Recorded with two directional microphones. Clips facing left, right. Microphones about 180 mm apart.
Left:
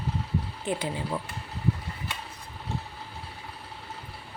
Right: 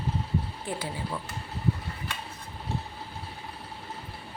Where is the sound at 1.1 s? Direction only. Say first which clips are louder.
Left 3 dB; 35° left (ahead or behind).